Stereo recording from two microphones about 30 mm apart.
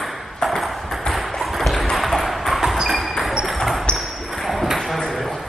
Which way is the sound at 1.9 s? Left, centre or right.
Centre.